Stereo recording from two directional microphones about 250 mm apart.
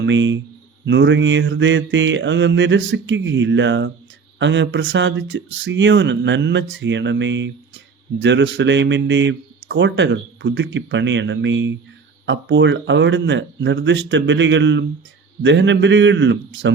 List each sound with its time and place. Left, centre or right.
0.0 s speech: right